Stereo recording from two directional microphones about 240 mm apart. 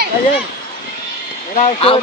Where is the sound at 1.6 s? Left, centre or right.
Left.